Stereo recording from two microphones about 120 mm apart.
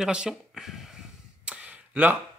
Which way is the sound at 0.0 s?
5° right (ahead or behind).